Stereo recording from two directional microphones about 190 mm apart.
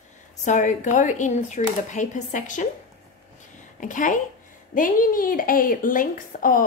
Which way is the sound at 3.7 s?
45° left (ahead or behind).